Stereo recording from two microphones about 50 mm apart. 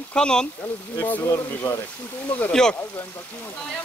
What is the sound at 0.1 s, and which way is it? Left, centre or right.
Speech, centre.